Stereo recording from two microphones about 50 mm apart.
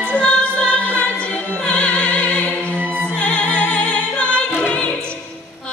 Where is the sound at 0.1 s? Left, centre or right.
Left.